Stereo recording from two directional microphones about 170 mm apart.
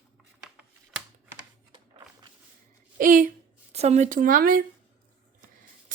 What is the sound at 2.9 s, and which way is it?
Speech, 50° right (ahead or behind).